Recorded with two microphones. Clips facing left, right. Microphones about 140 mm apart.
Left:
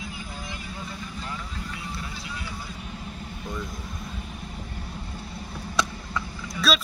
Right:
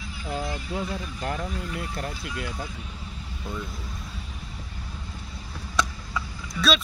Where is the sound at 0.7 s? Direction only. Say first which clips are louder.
Right 6 dB; 60° right (ahead or behind).